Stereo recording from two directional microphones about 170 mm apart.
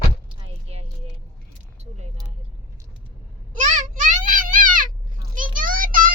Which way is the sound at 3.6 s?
45° right (ahead or behind).